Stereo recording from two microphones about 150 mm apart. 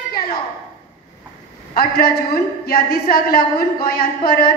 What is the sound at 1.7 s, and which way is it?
A woman's voice, 80° left.